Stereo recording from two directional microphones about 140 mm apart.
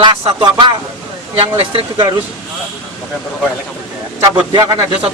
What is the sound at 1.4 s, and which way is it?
Speech, 45° right (ahead or behind).